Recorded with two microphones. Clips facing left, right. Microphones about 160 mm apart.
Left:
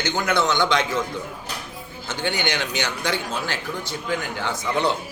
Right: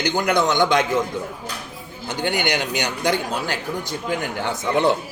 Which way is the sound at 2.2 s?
45° right (ahead or behind).